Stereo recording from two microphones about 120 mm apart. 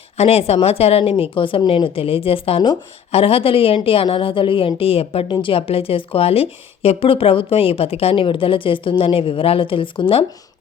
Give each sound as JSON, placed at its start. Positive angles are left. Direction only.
{"t": 0.2, "sound": "a woman's voice", "side_deg": 60}